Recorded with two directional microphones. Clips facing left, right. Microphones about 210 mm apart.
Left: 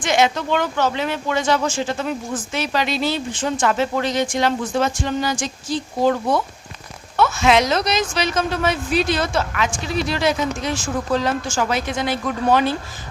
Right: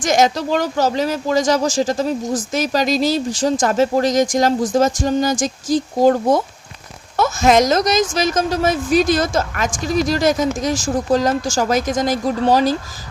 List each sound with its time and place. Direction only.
0.0 s a woman's voice: 45° right (ahead or behind)